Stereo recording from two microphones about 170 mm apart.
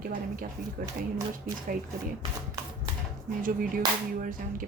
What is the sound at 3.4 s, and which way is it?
Speech, 55° right (ahead or behind).